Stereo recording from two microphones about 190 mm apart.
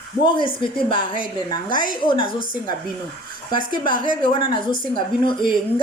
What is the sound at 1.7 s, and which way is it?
Speech, 45° right (ahead or behind).